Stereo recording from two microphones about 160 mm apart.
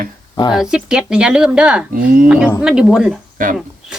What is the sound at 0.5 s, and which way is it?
Speech, 5° right (ahead or behind).